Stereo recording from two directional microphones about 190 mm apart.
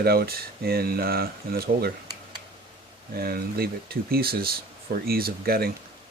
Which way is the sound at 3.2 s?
55° right (ahead or behind).